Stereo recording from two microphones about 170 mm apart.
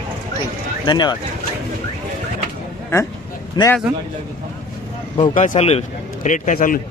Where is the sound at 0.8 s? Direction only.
25° left (ahead or behind).